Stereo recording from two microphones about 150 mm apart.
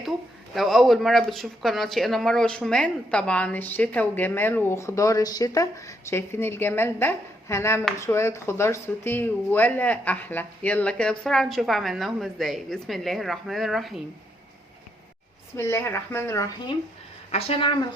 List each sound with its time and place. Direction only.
0.5 s speech: centre (ahead or behind)
15.5 s speech: 15° left (ahead or behind)
17.3 s a woman's voice: 40° left (ahead or behind)